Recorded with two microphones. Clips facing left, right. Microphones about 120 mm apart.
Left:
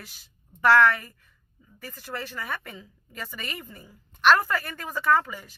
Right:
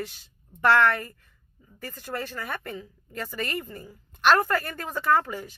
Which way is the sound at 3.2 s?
5° left (ahead or behind).